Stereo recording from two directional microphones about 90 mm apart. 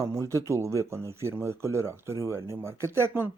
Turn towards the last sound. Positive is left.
turn(degrees=-25)  # may be behind; listen again after turning